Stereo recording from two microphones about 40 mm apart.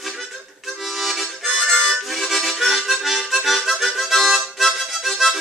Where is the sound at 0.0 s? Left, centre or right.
Centre.